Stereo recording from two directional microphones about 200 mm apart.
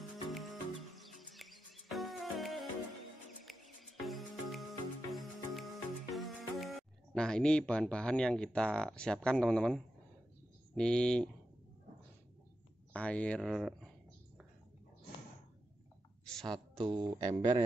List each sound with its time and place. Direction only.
0.3 s music: centre (ahead or behind)
7.2 s speech: 5° left (ahead or behind)
12.9 s speech: 5° left (ahead or behind)
16.3 s a sound: centre (ahead or behind)
16.7 s speech: 25° right (ahead or behind)